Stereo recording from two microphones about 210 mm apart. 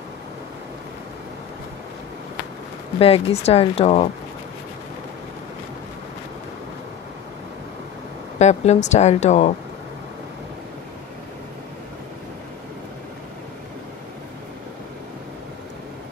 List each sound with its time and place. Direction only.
3.0 s speech: 30° left (ahead or behind)
8.4 s speech: 35° left (ahead or behind)